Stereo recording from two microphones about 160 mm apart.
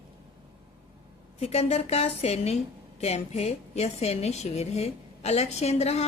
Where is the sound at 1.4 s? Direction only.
40° left (ahead or behind).